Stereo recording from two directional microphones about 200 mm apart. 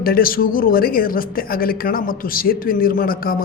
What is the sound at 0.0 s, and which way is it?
A woman's voice, 45° left (ahead or behind).